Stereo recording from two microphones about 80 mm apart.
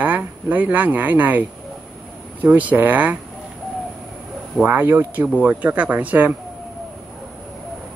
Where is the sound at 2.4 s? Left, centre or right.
Right.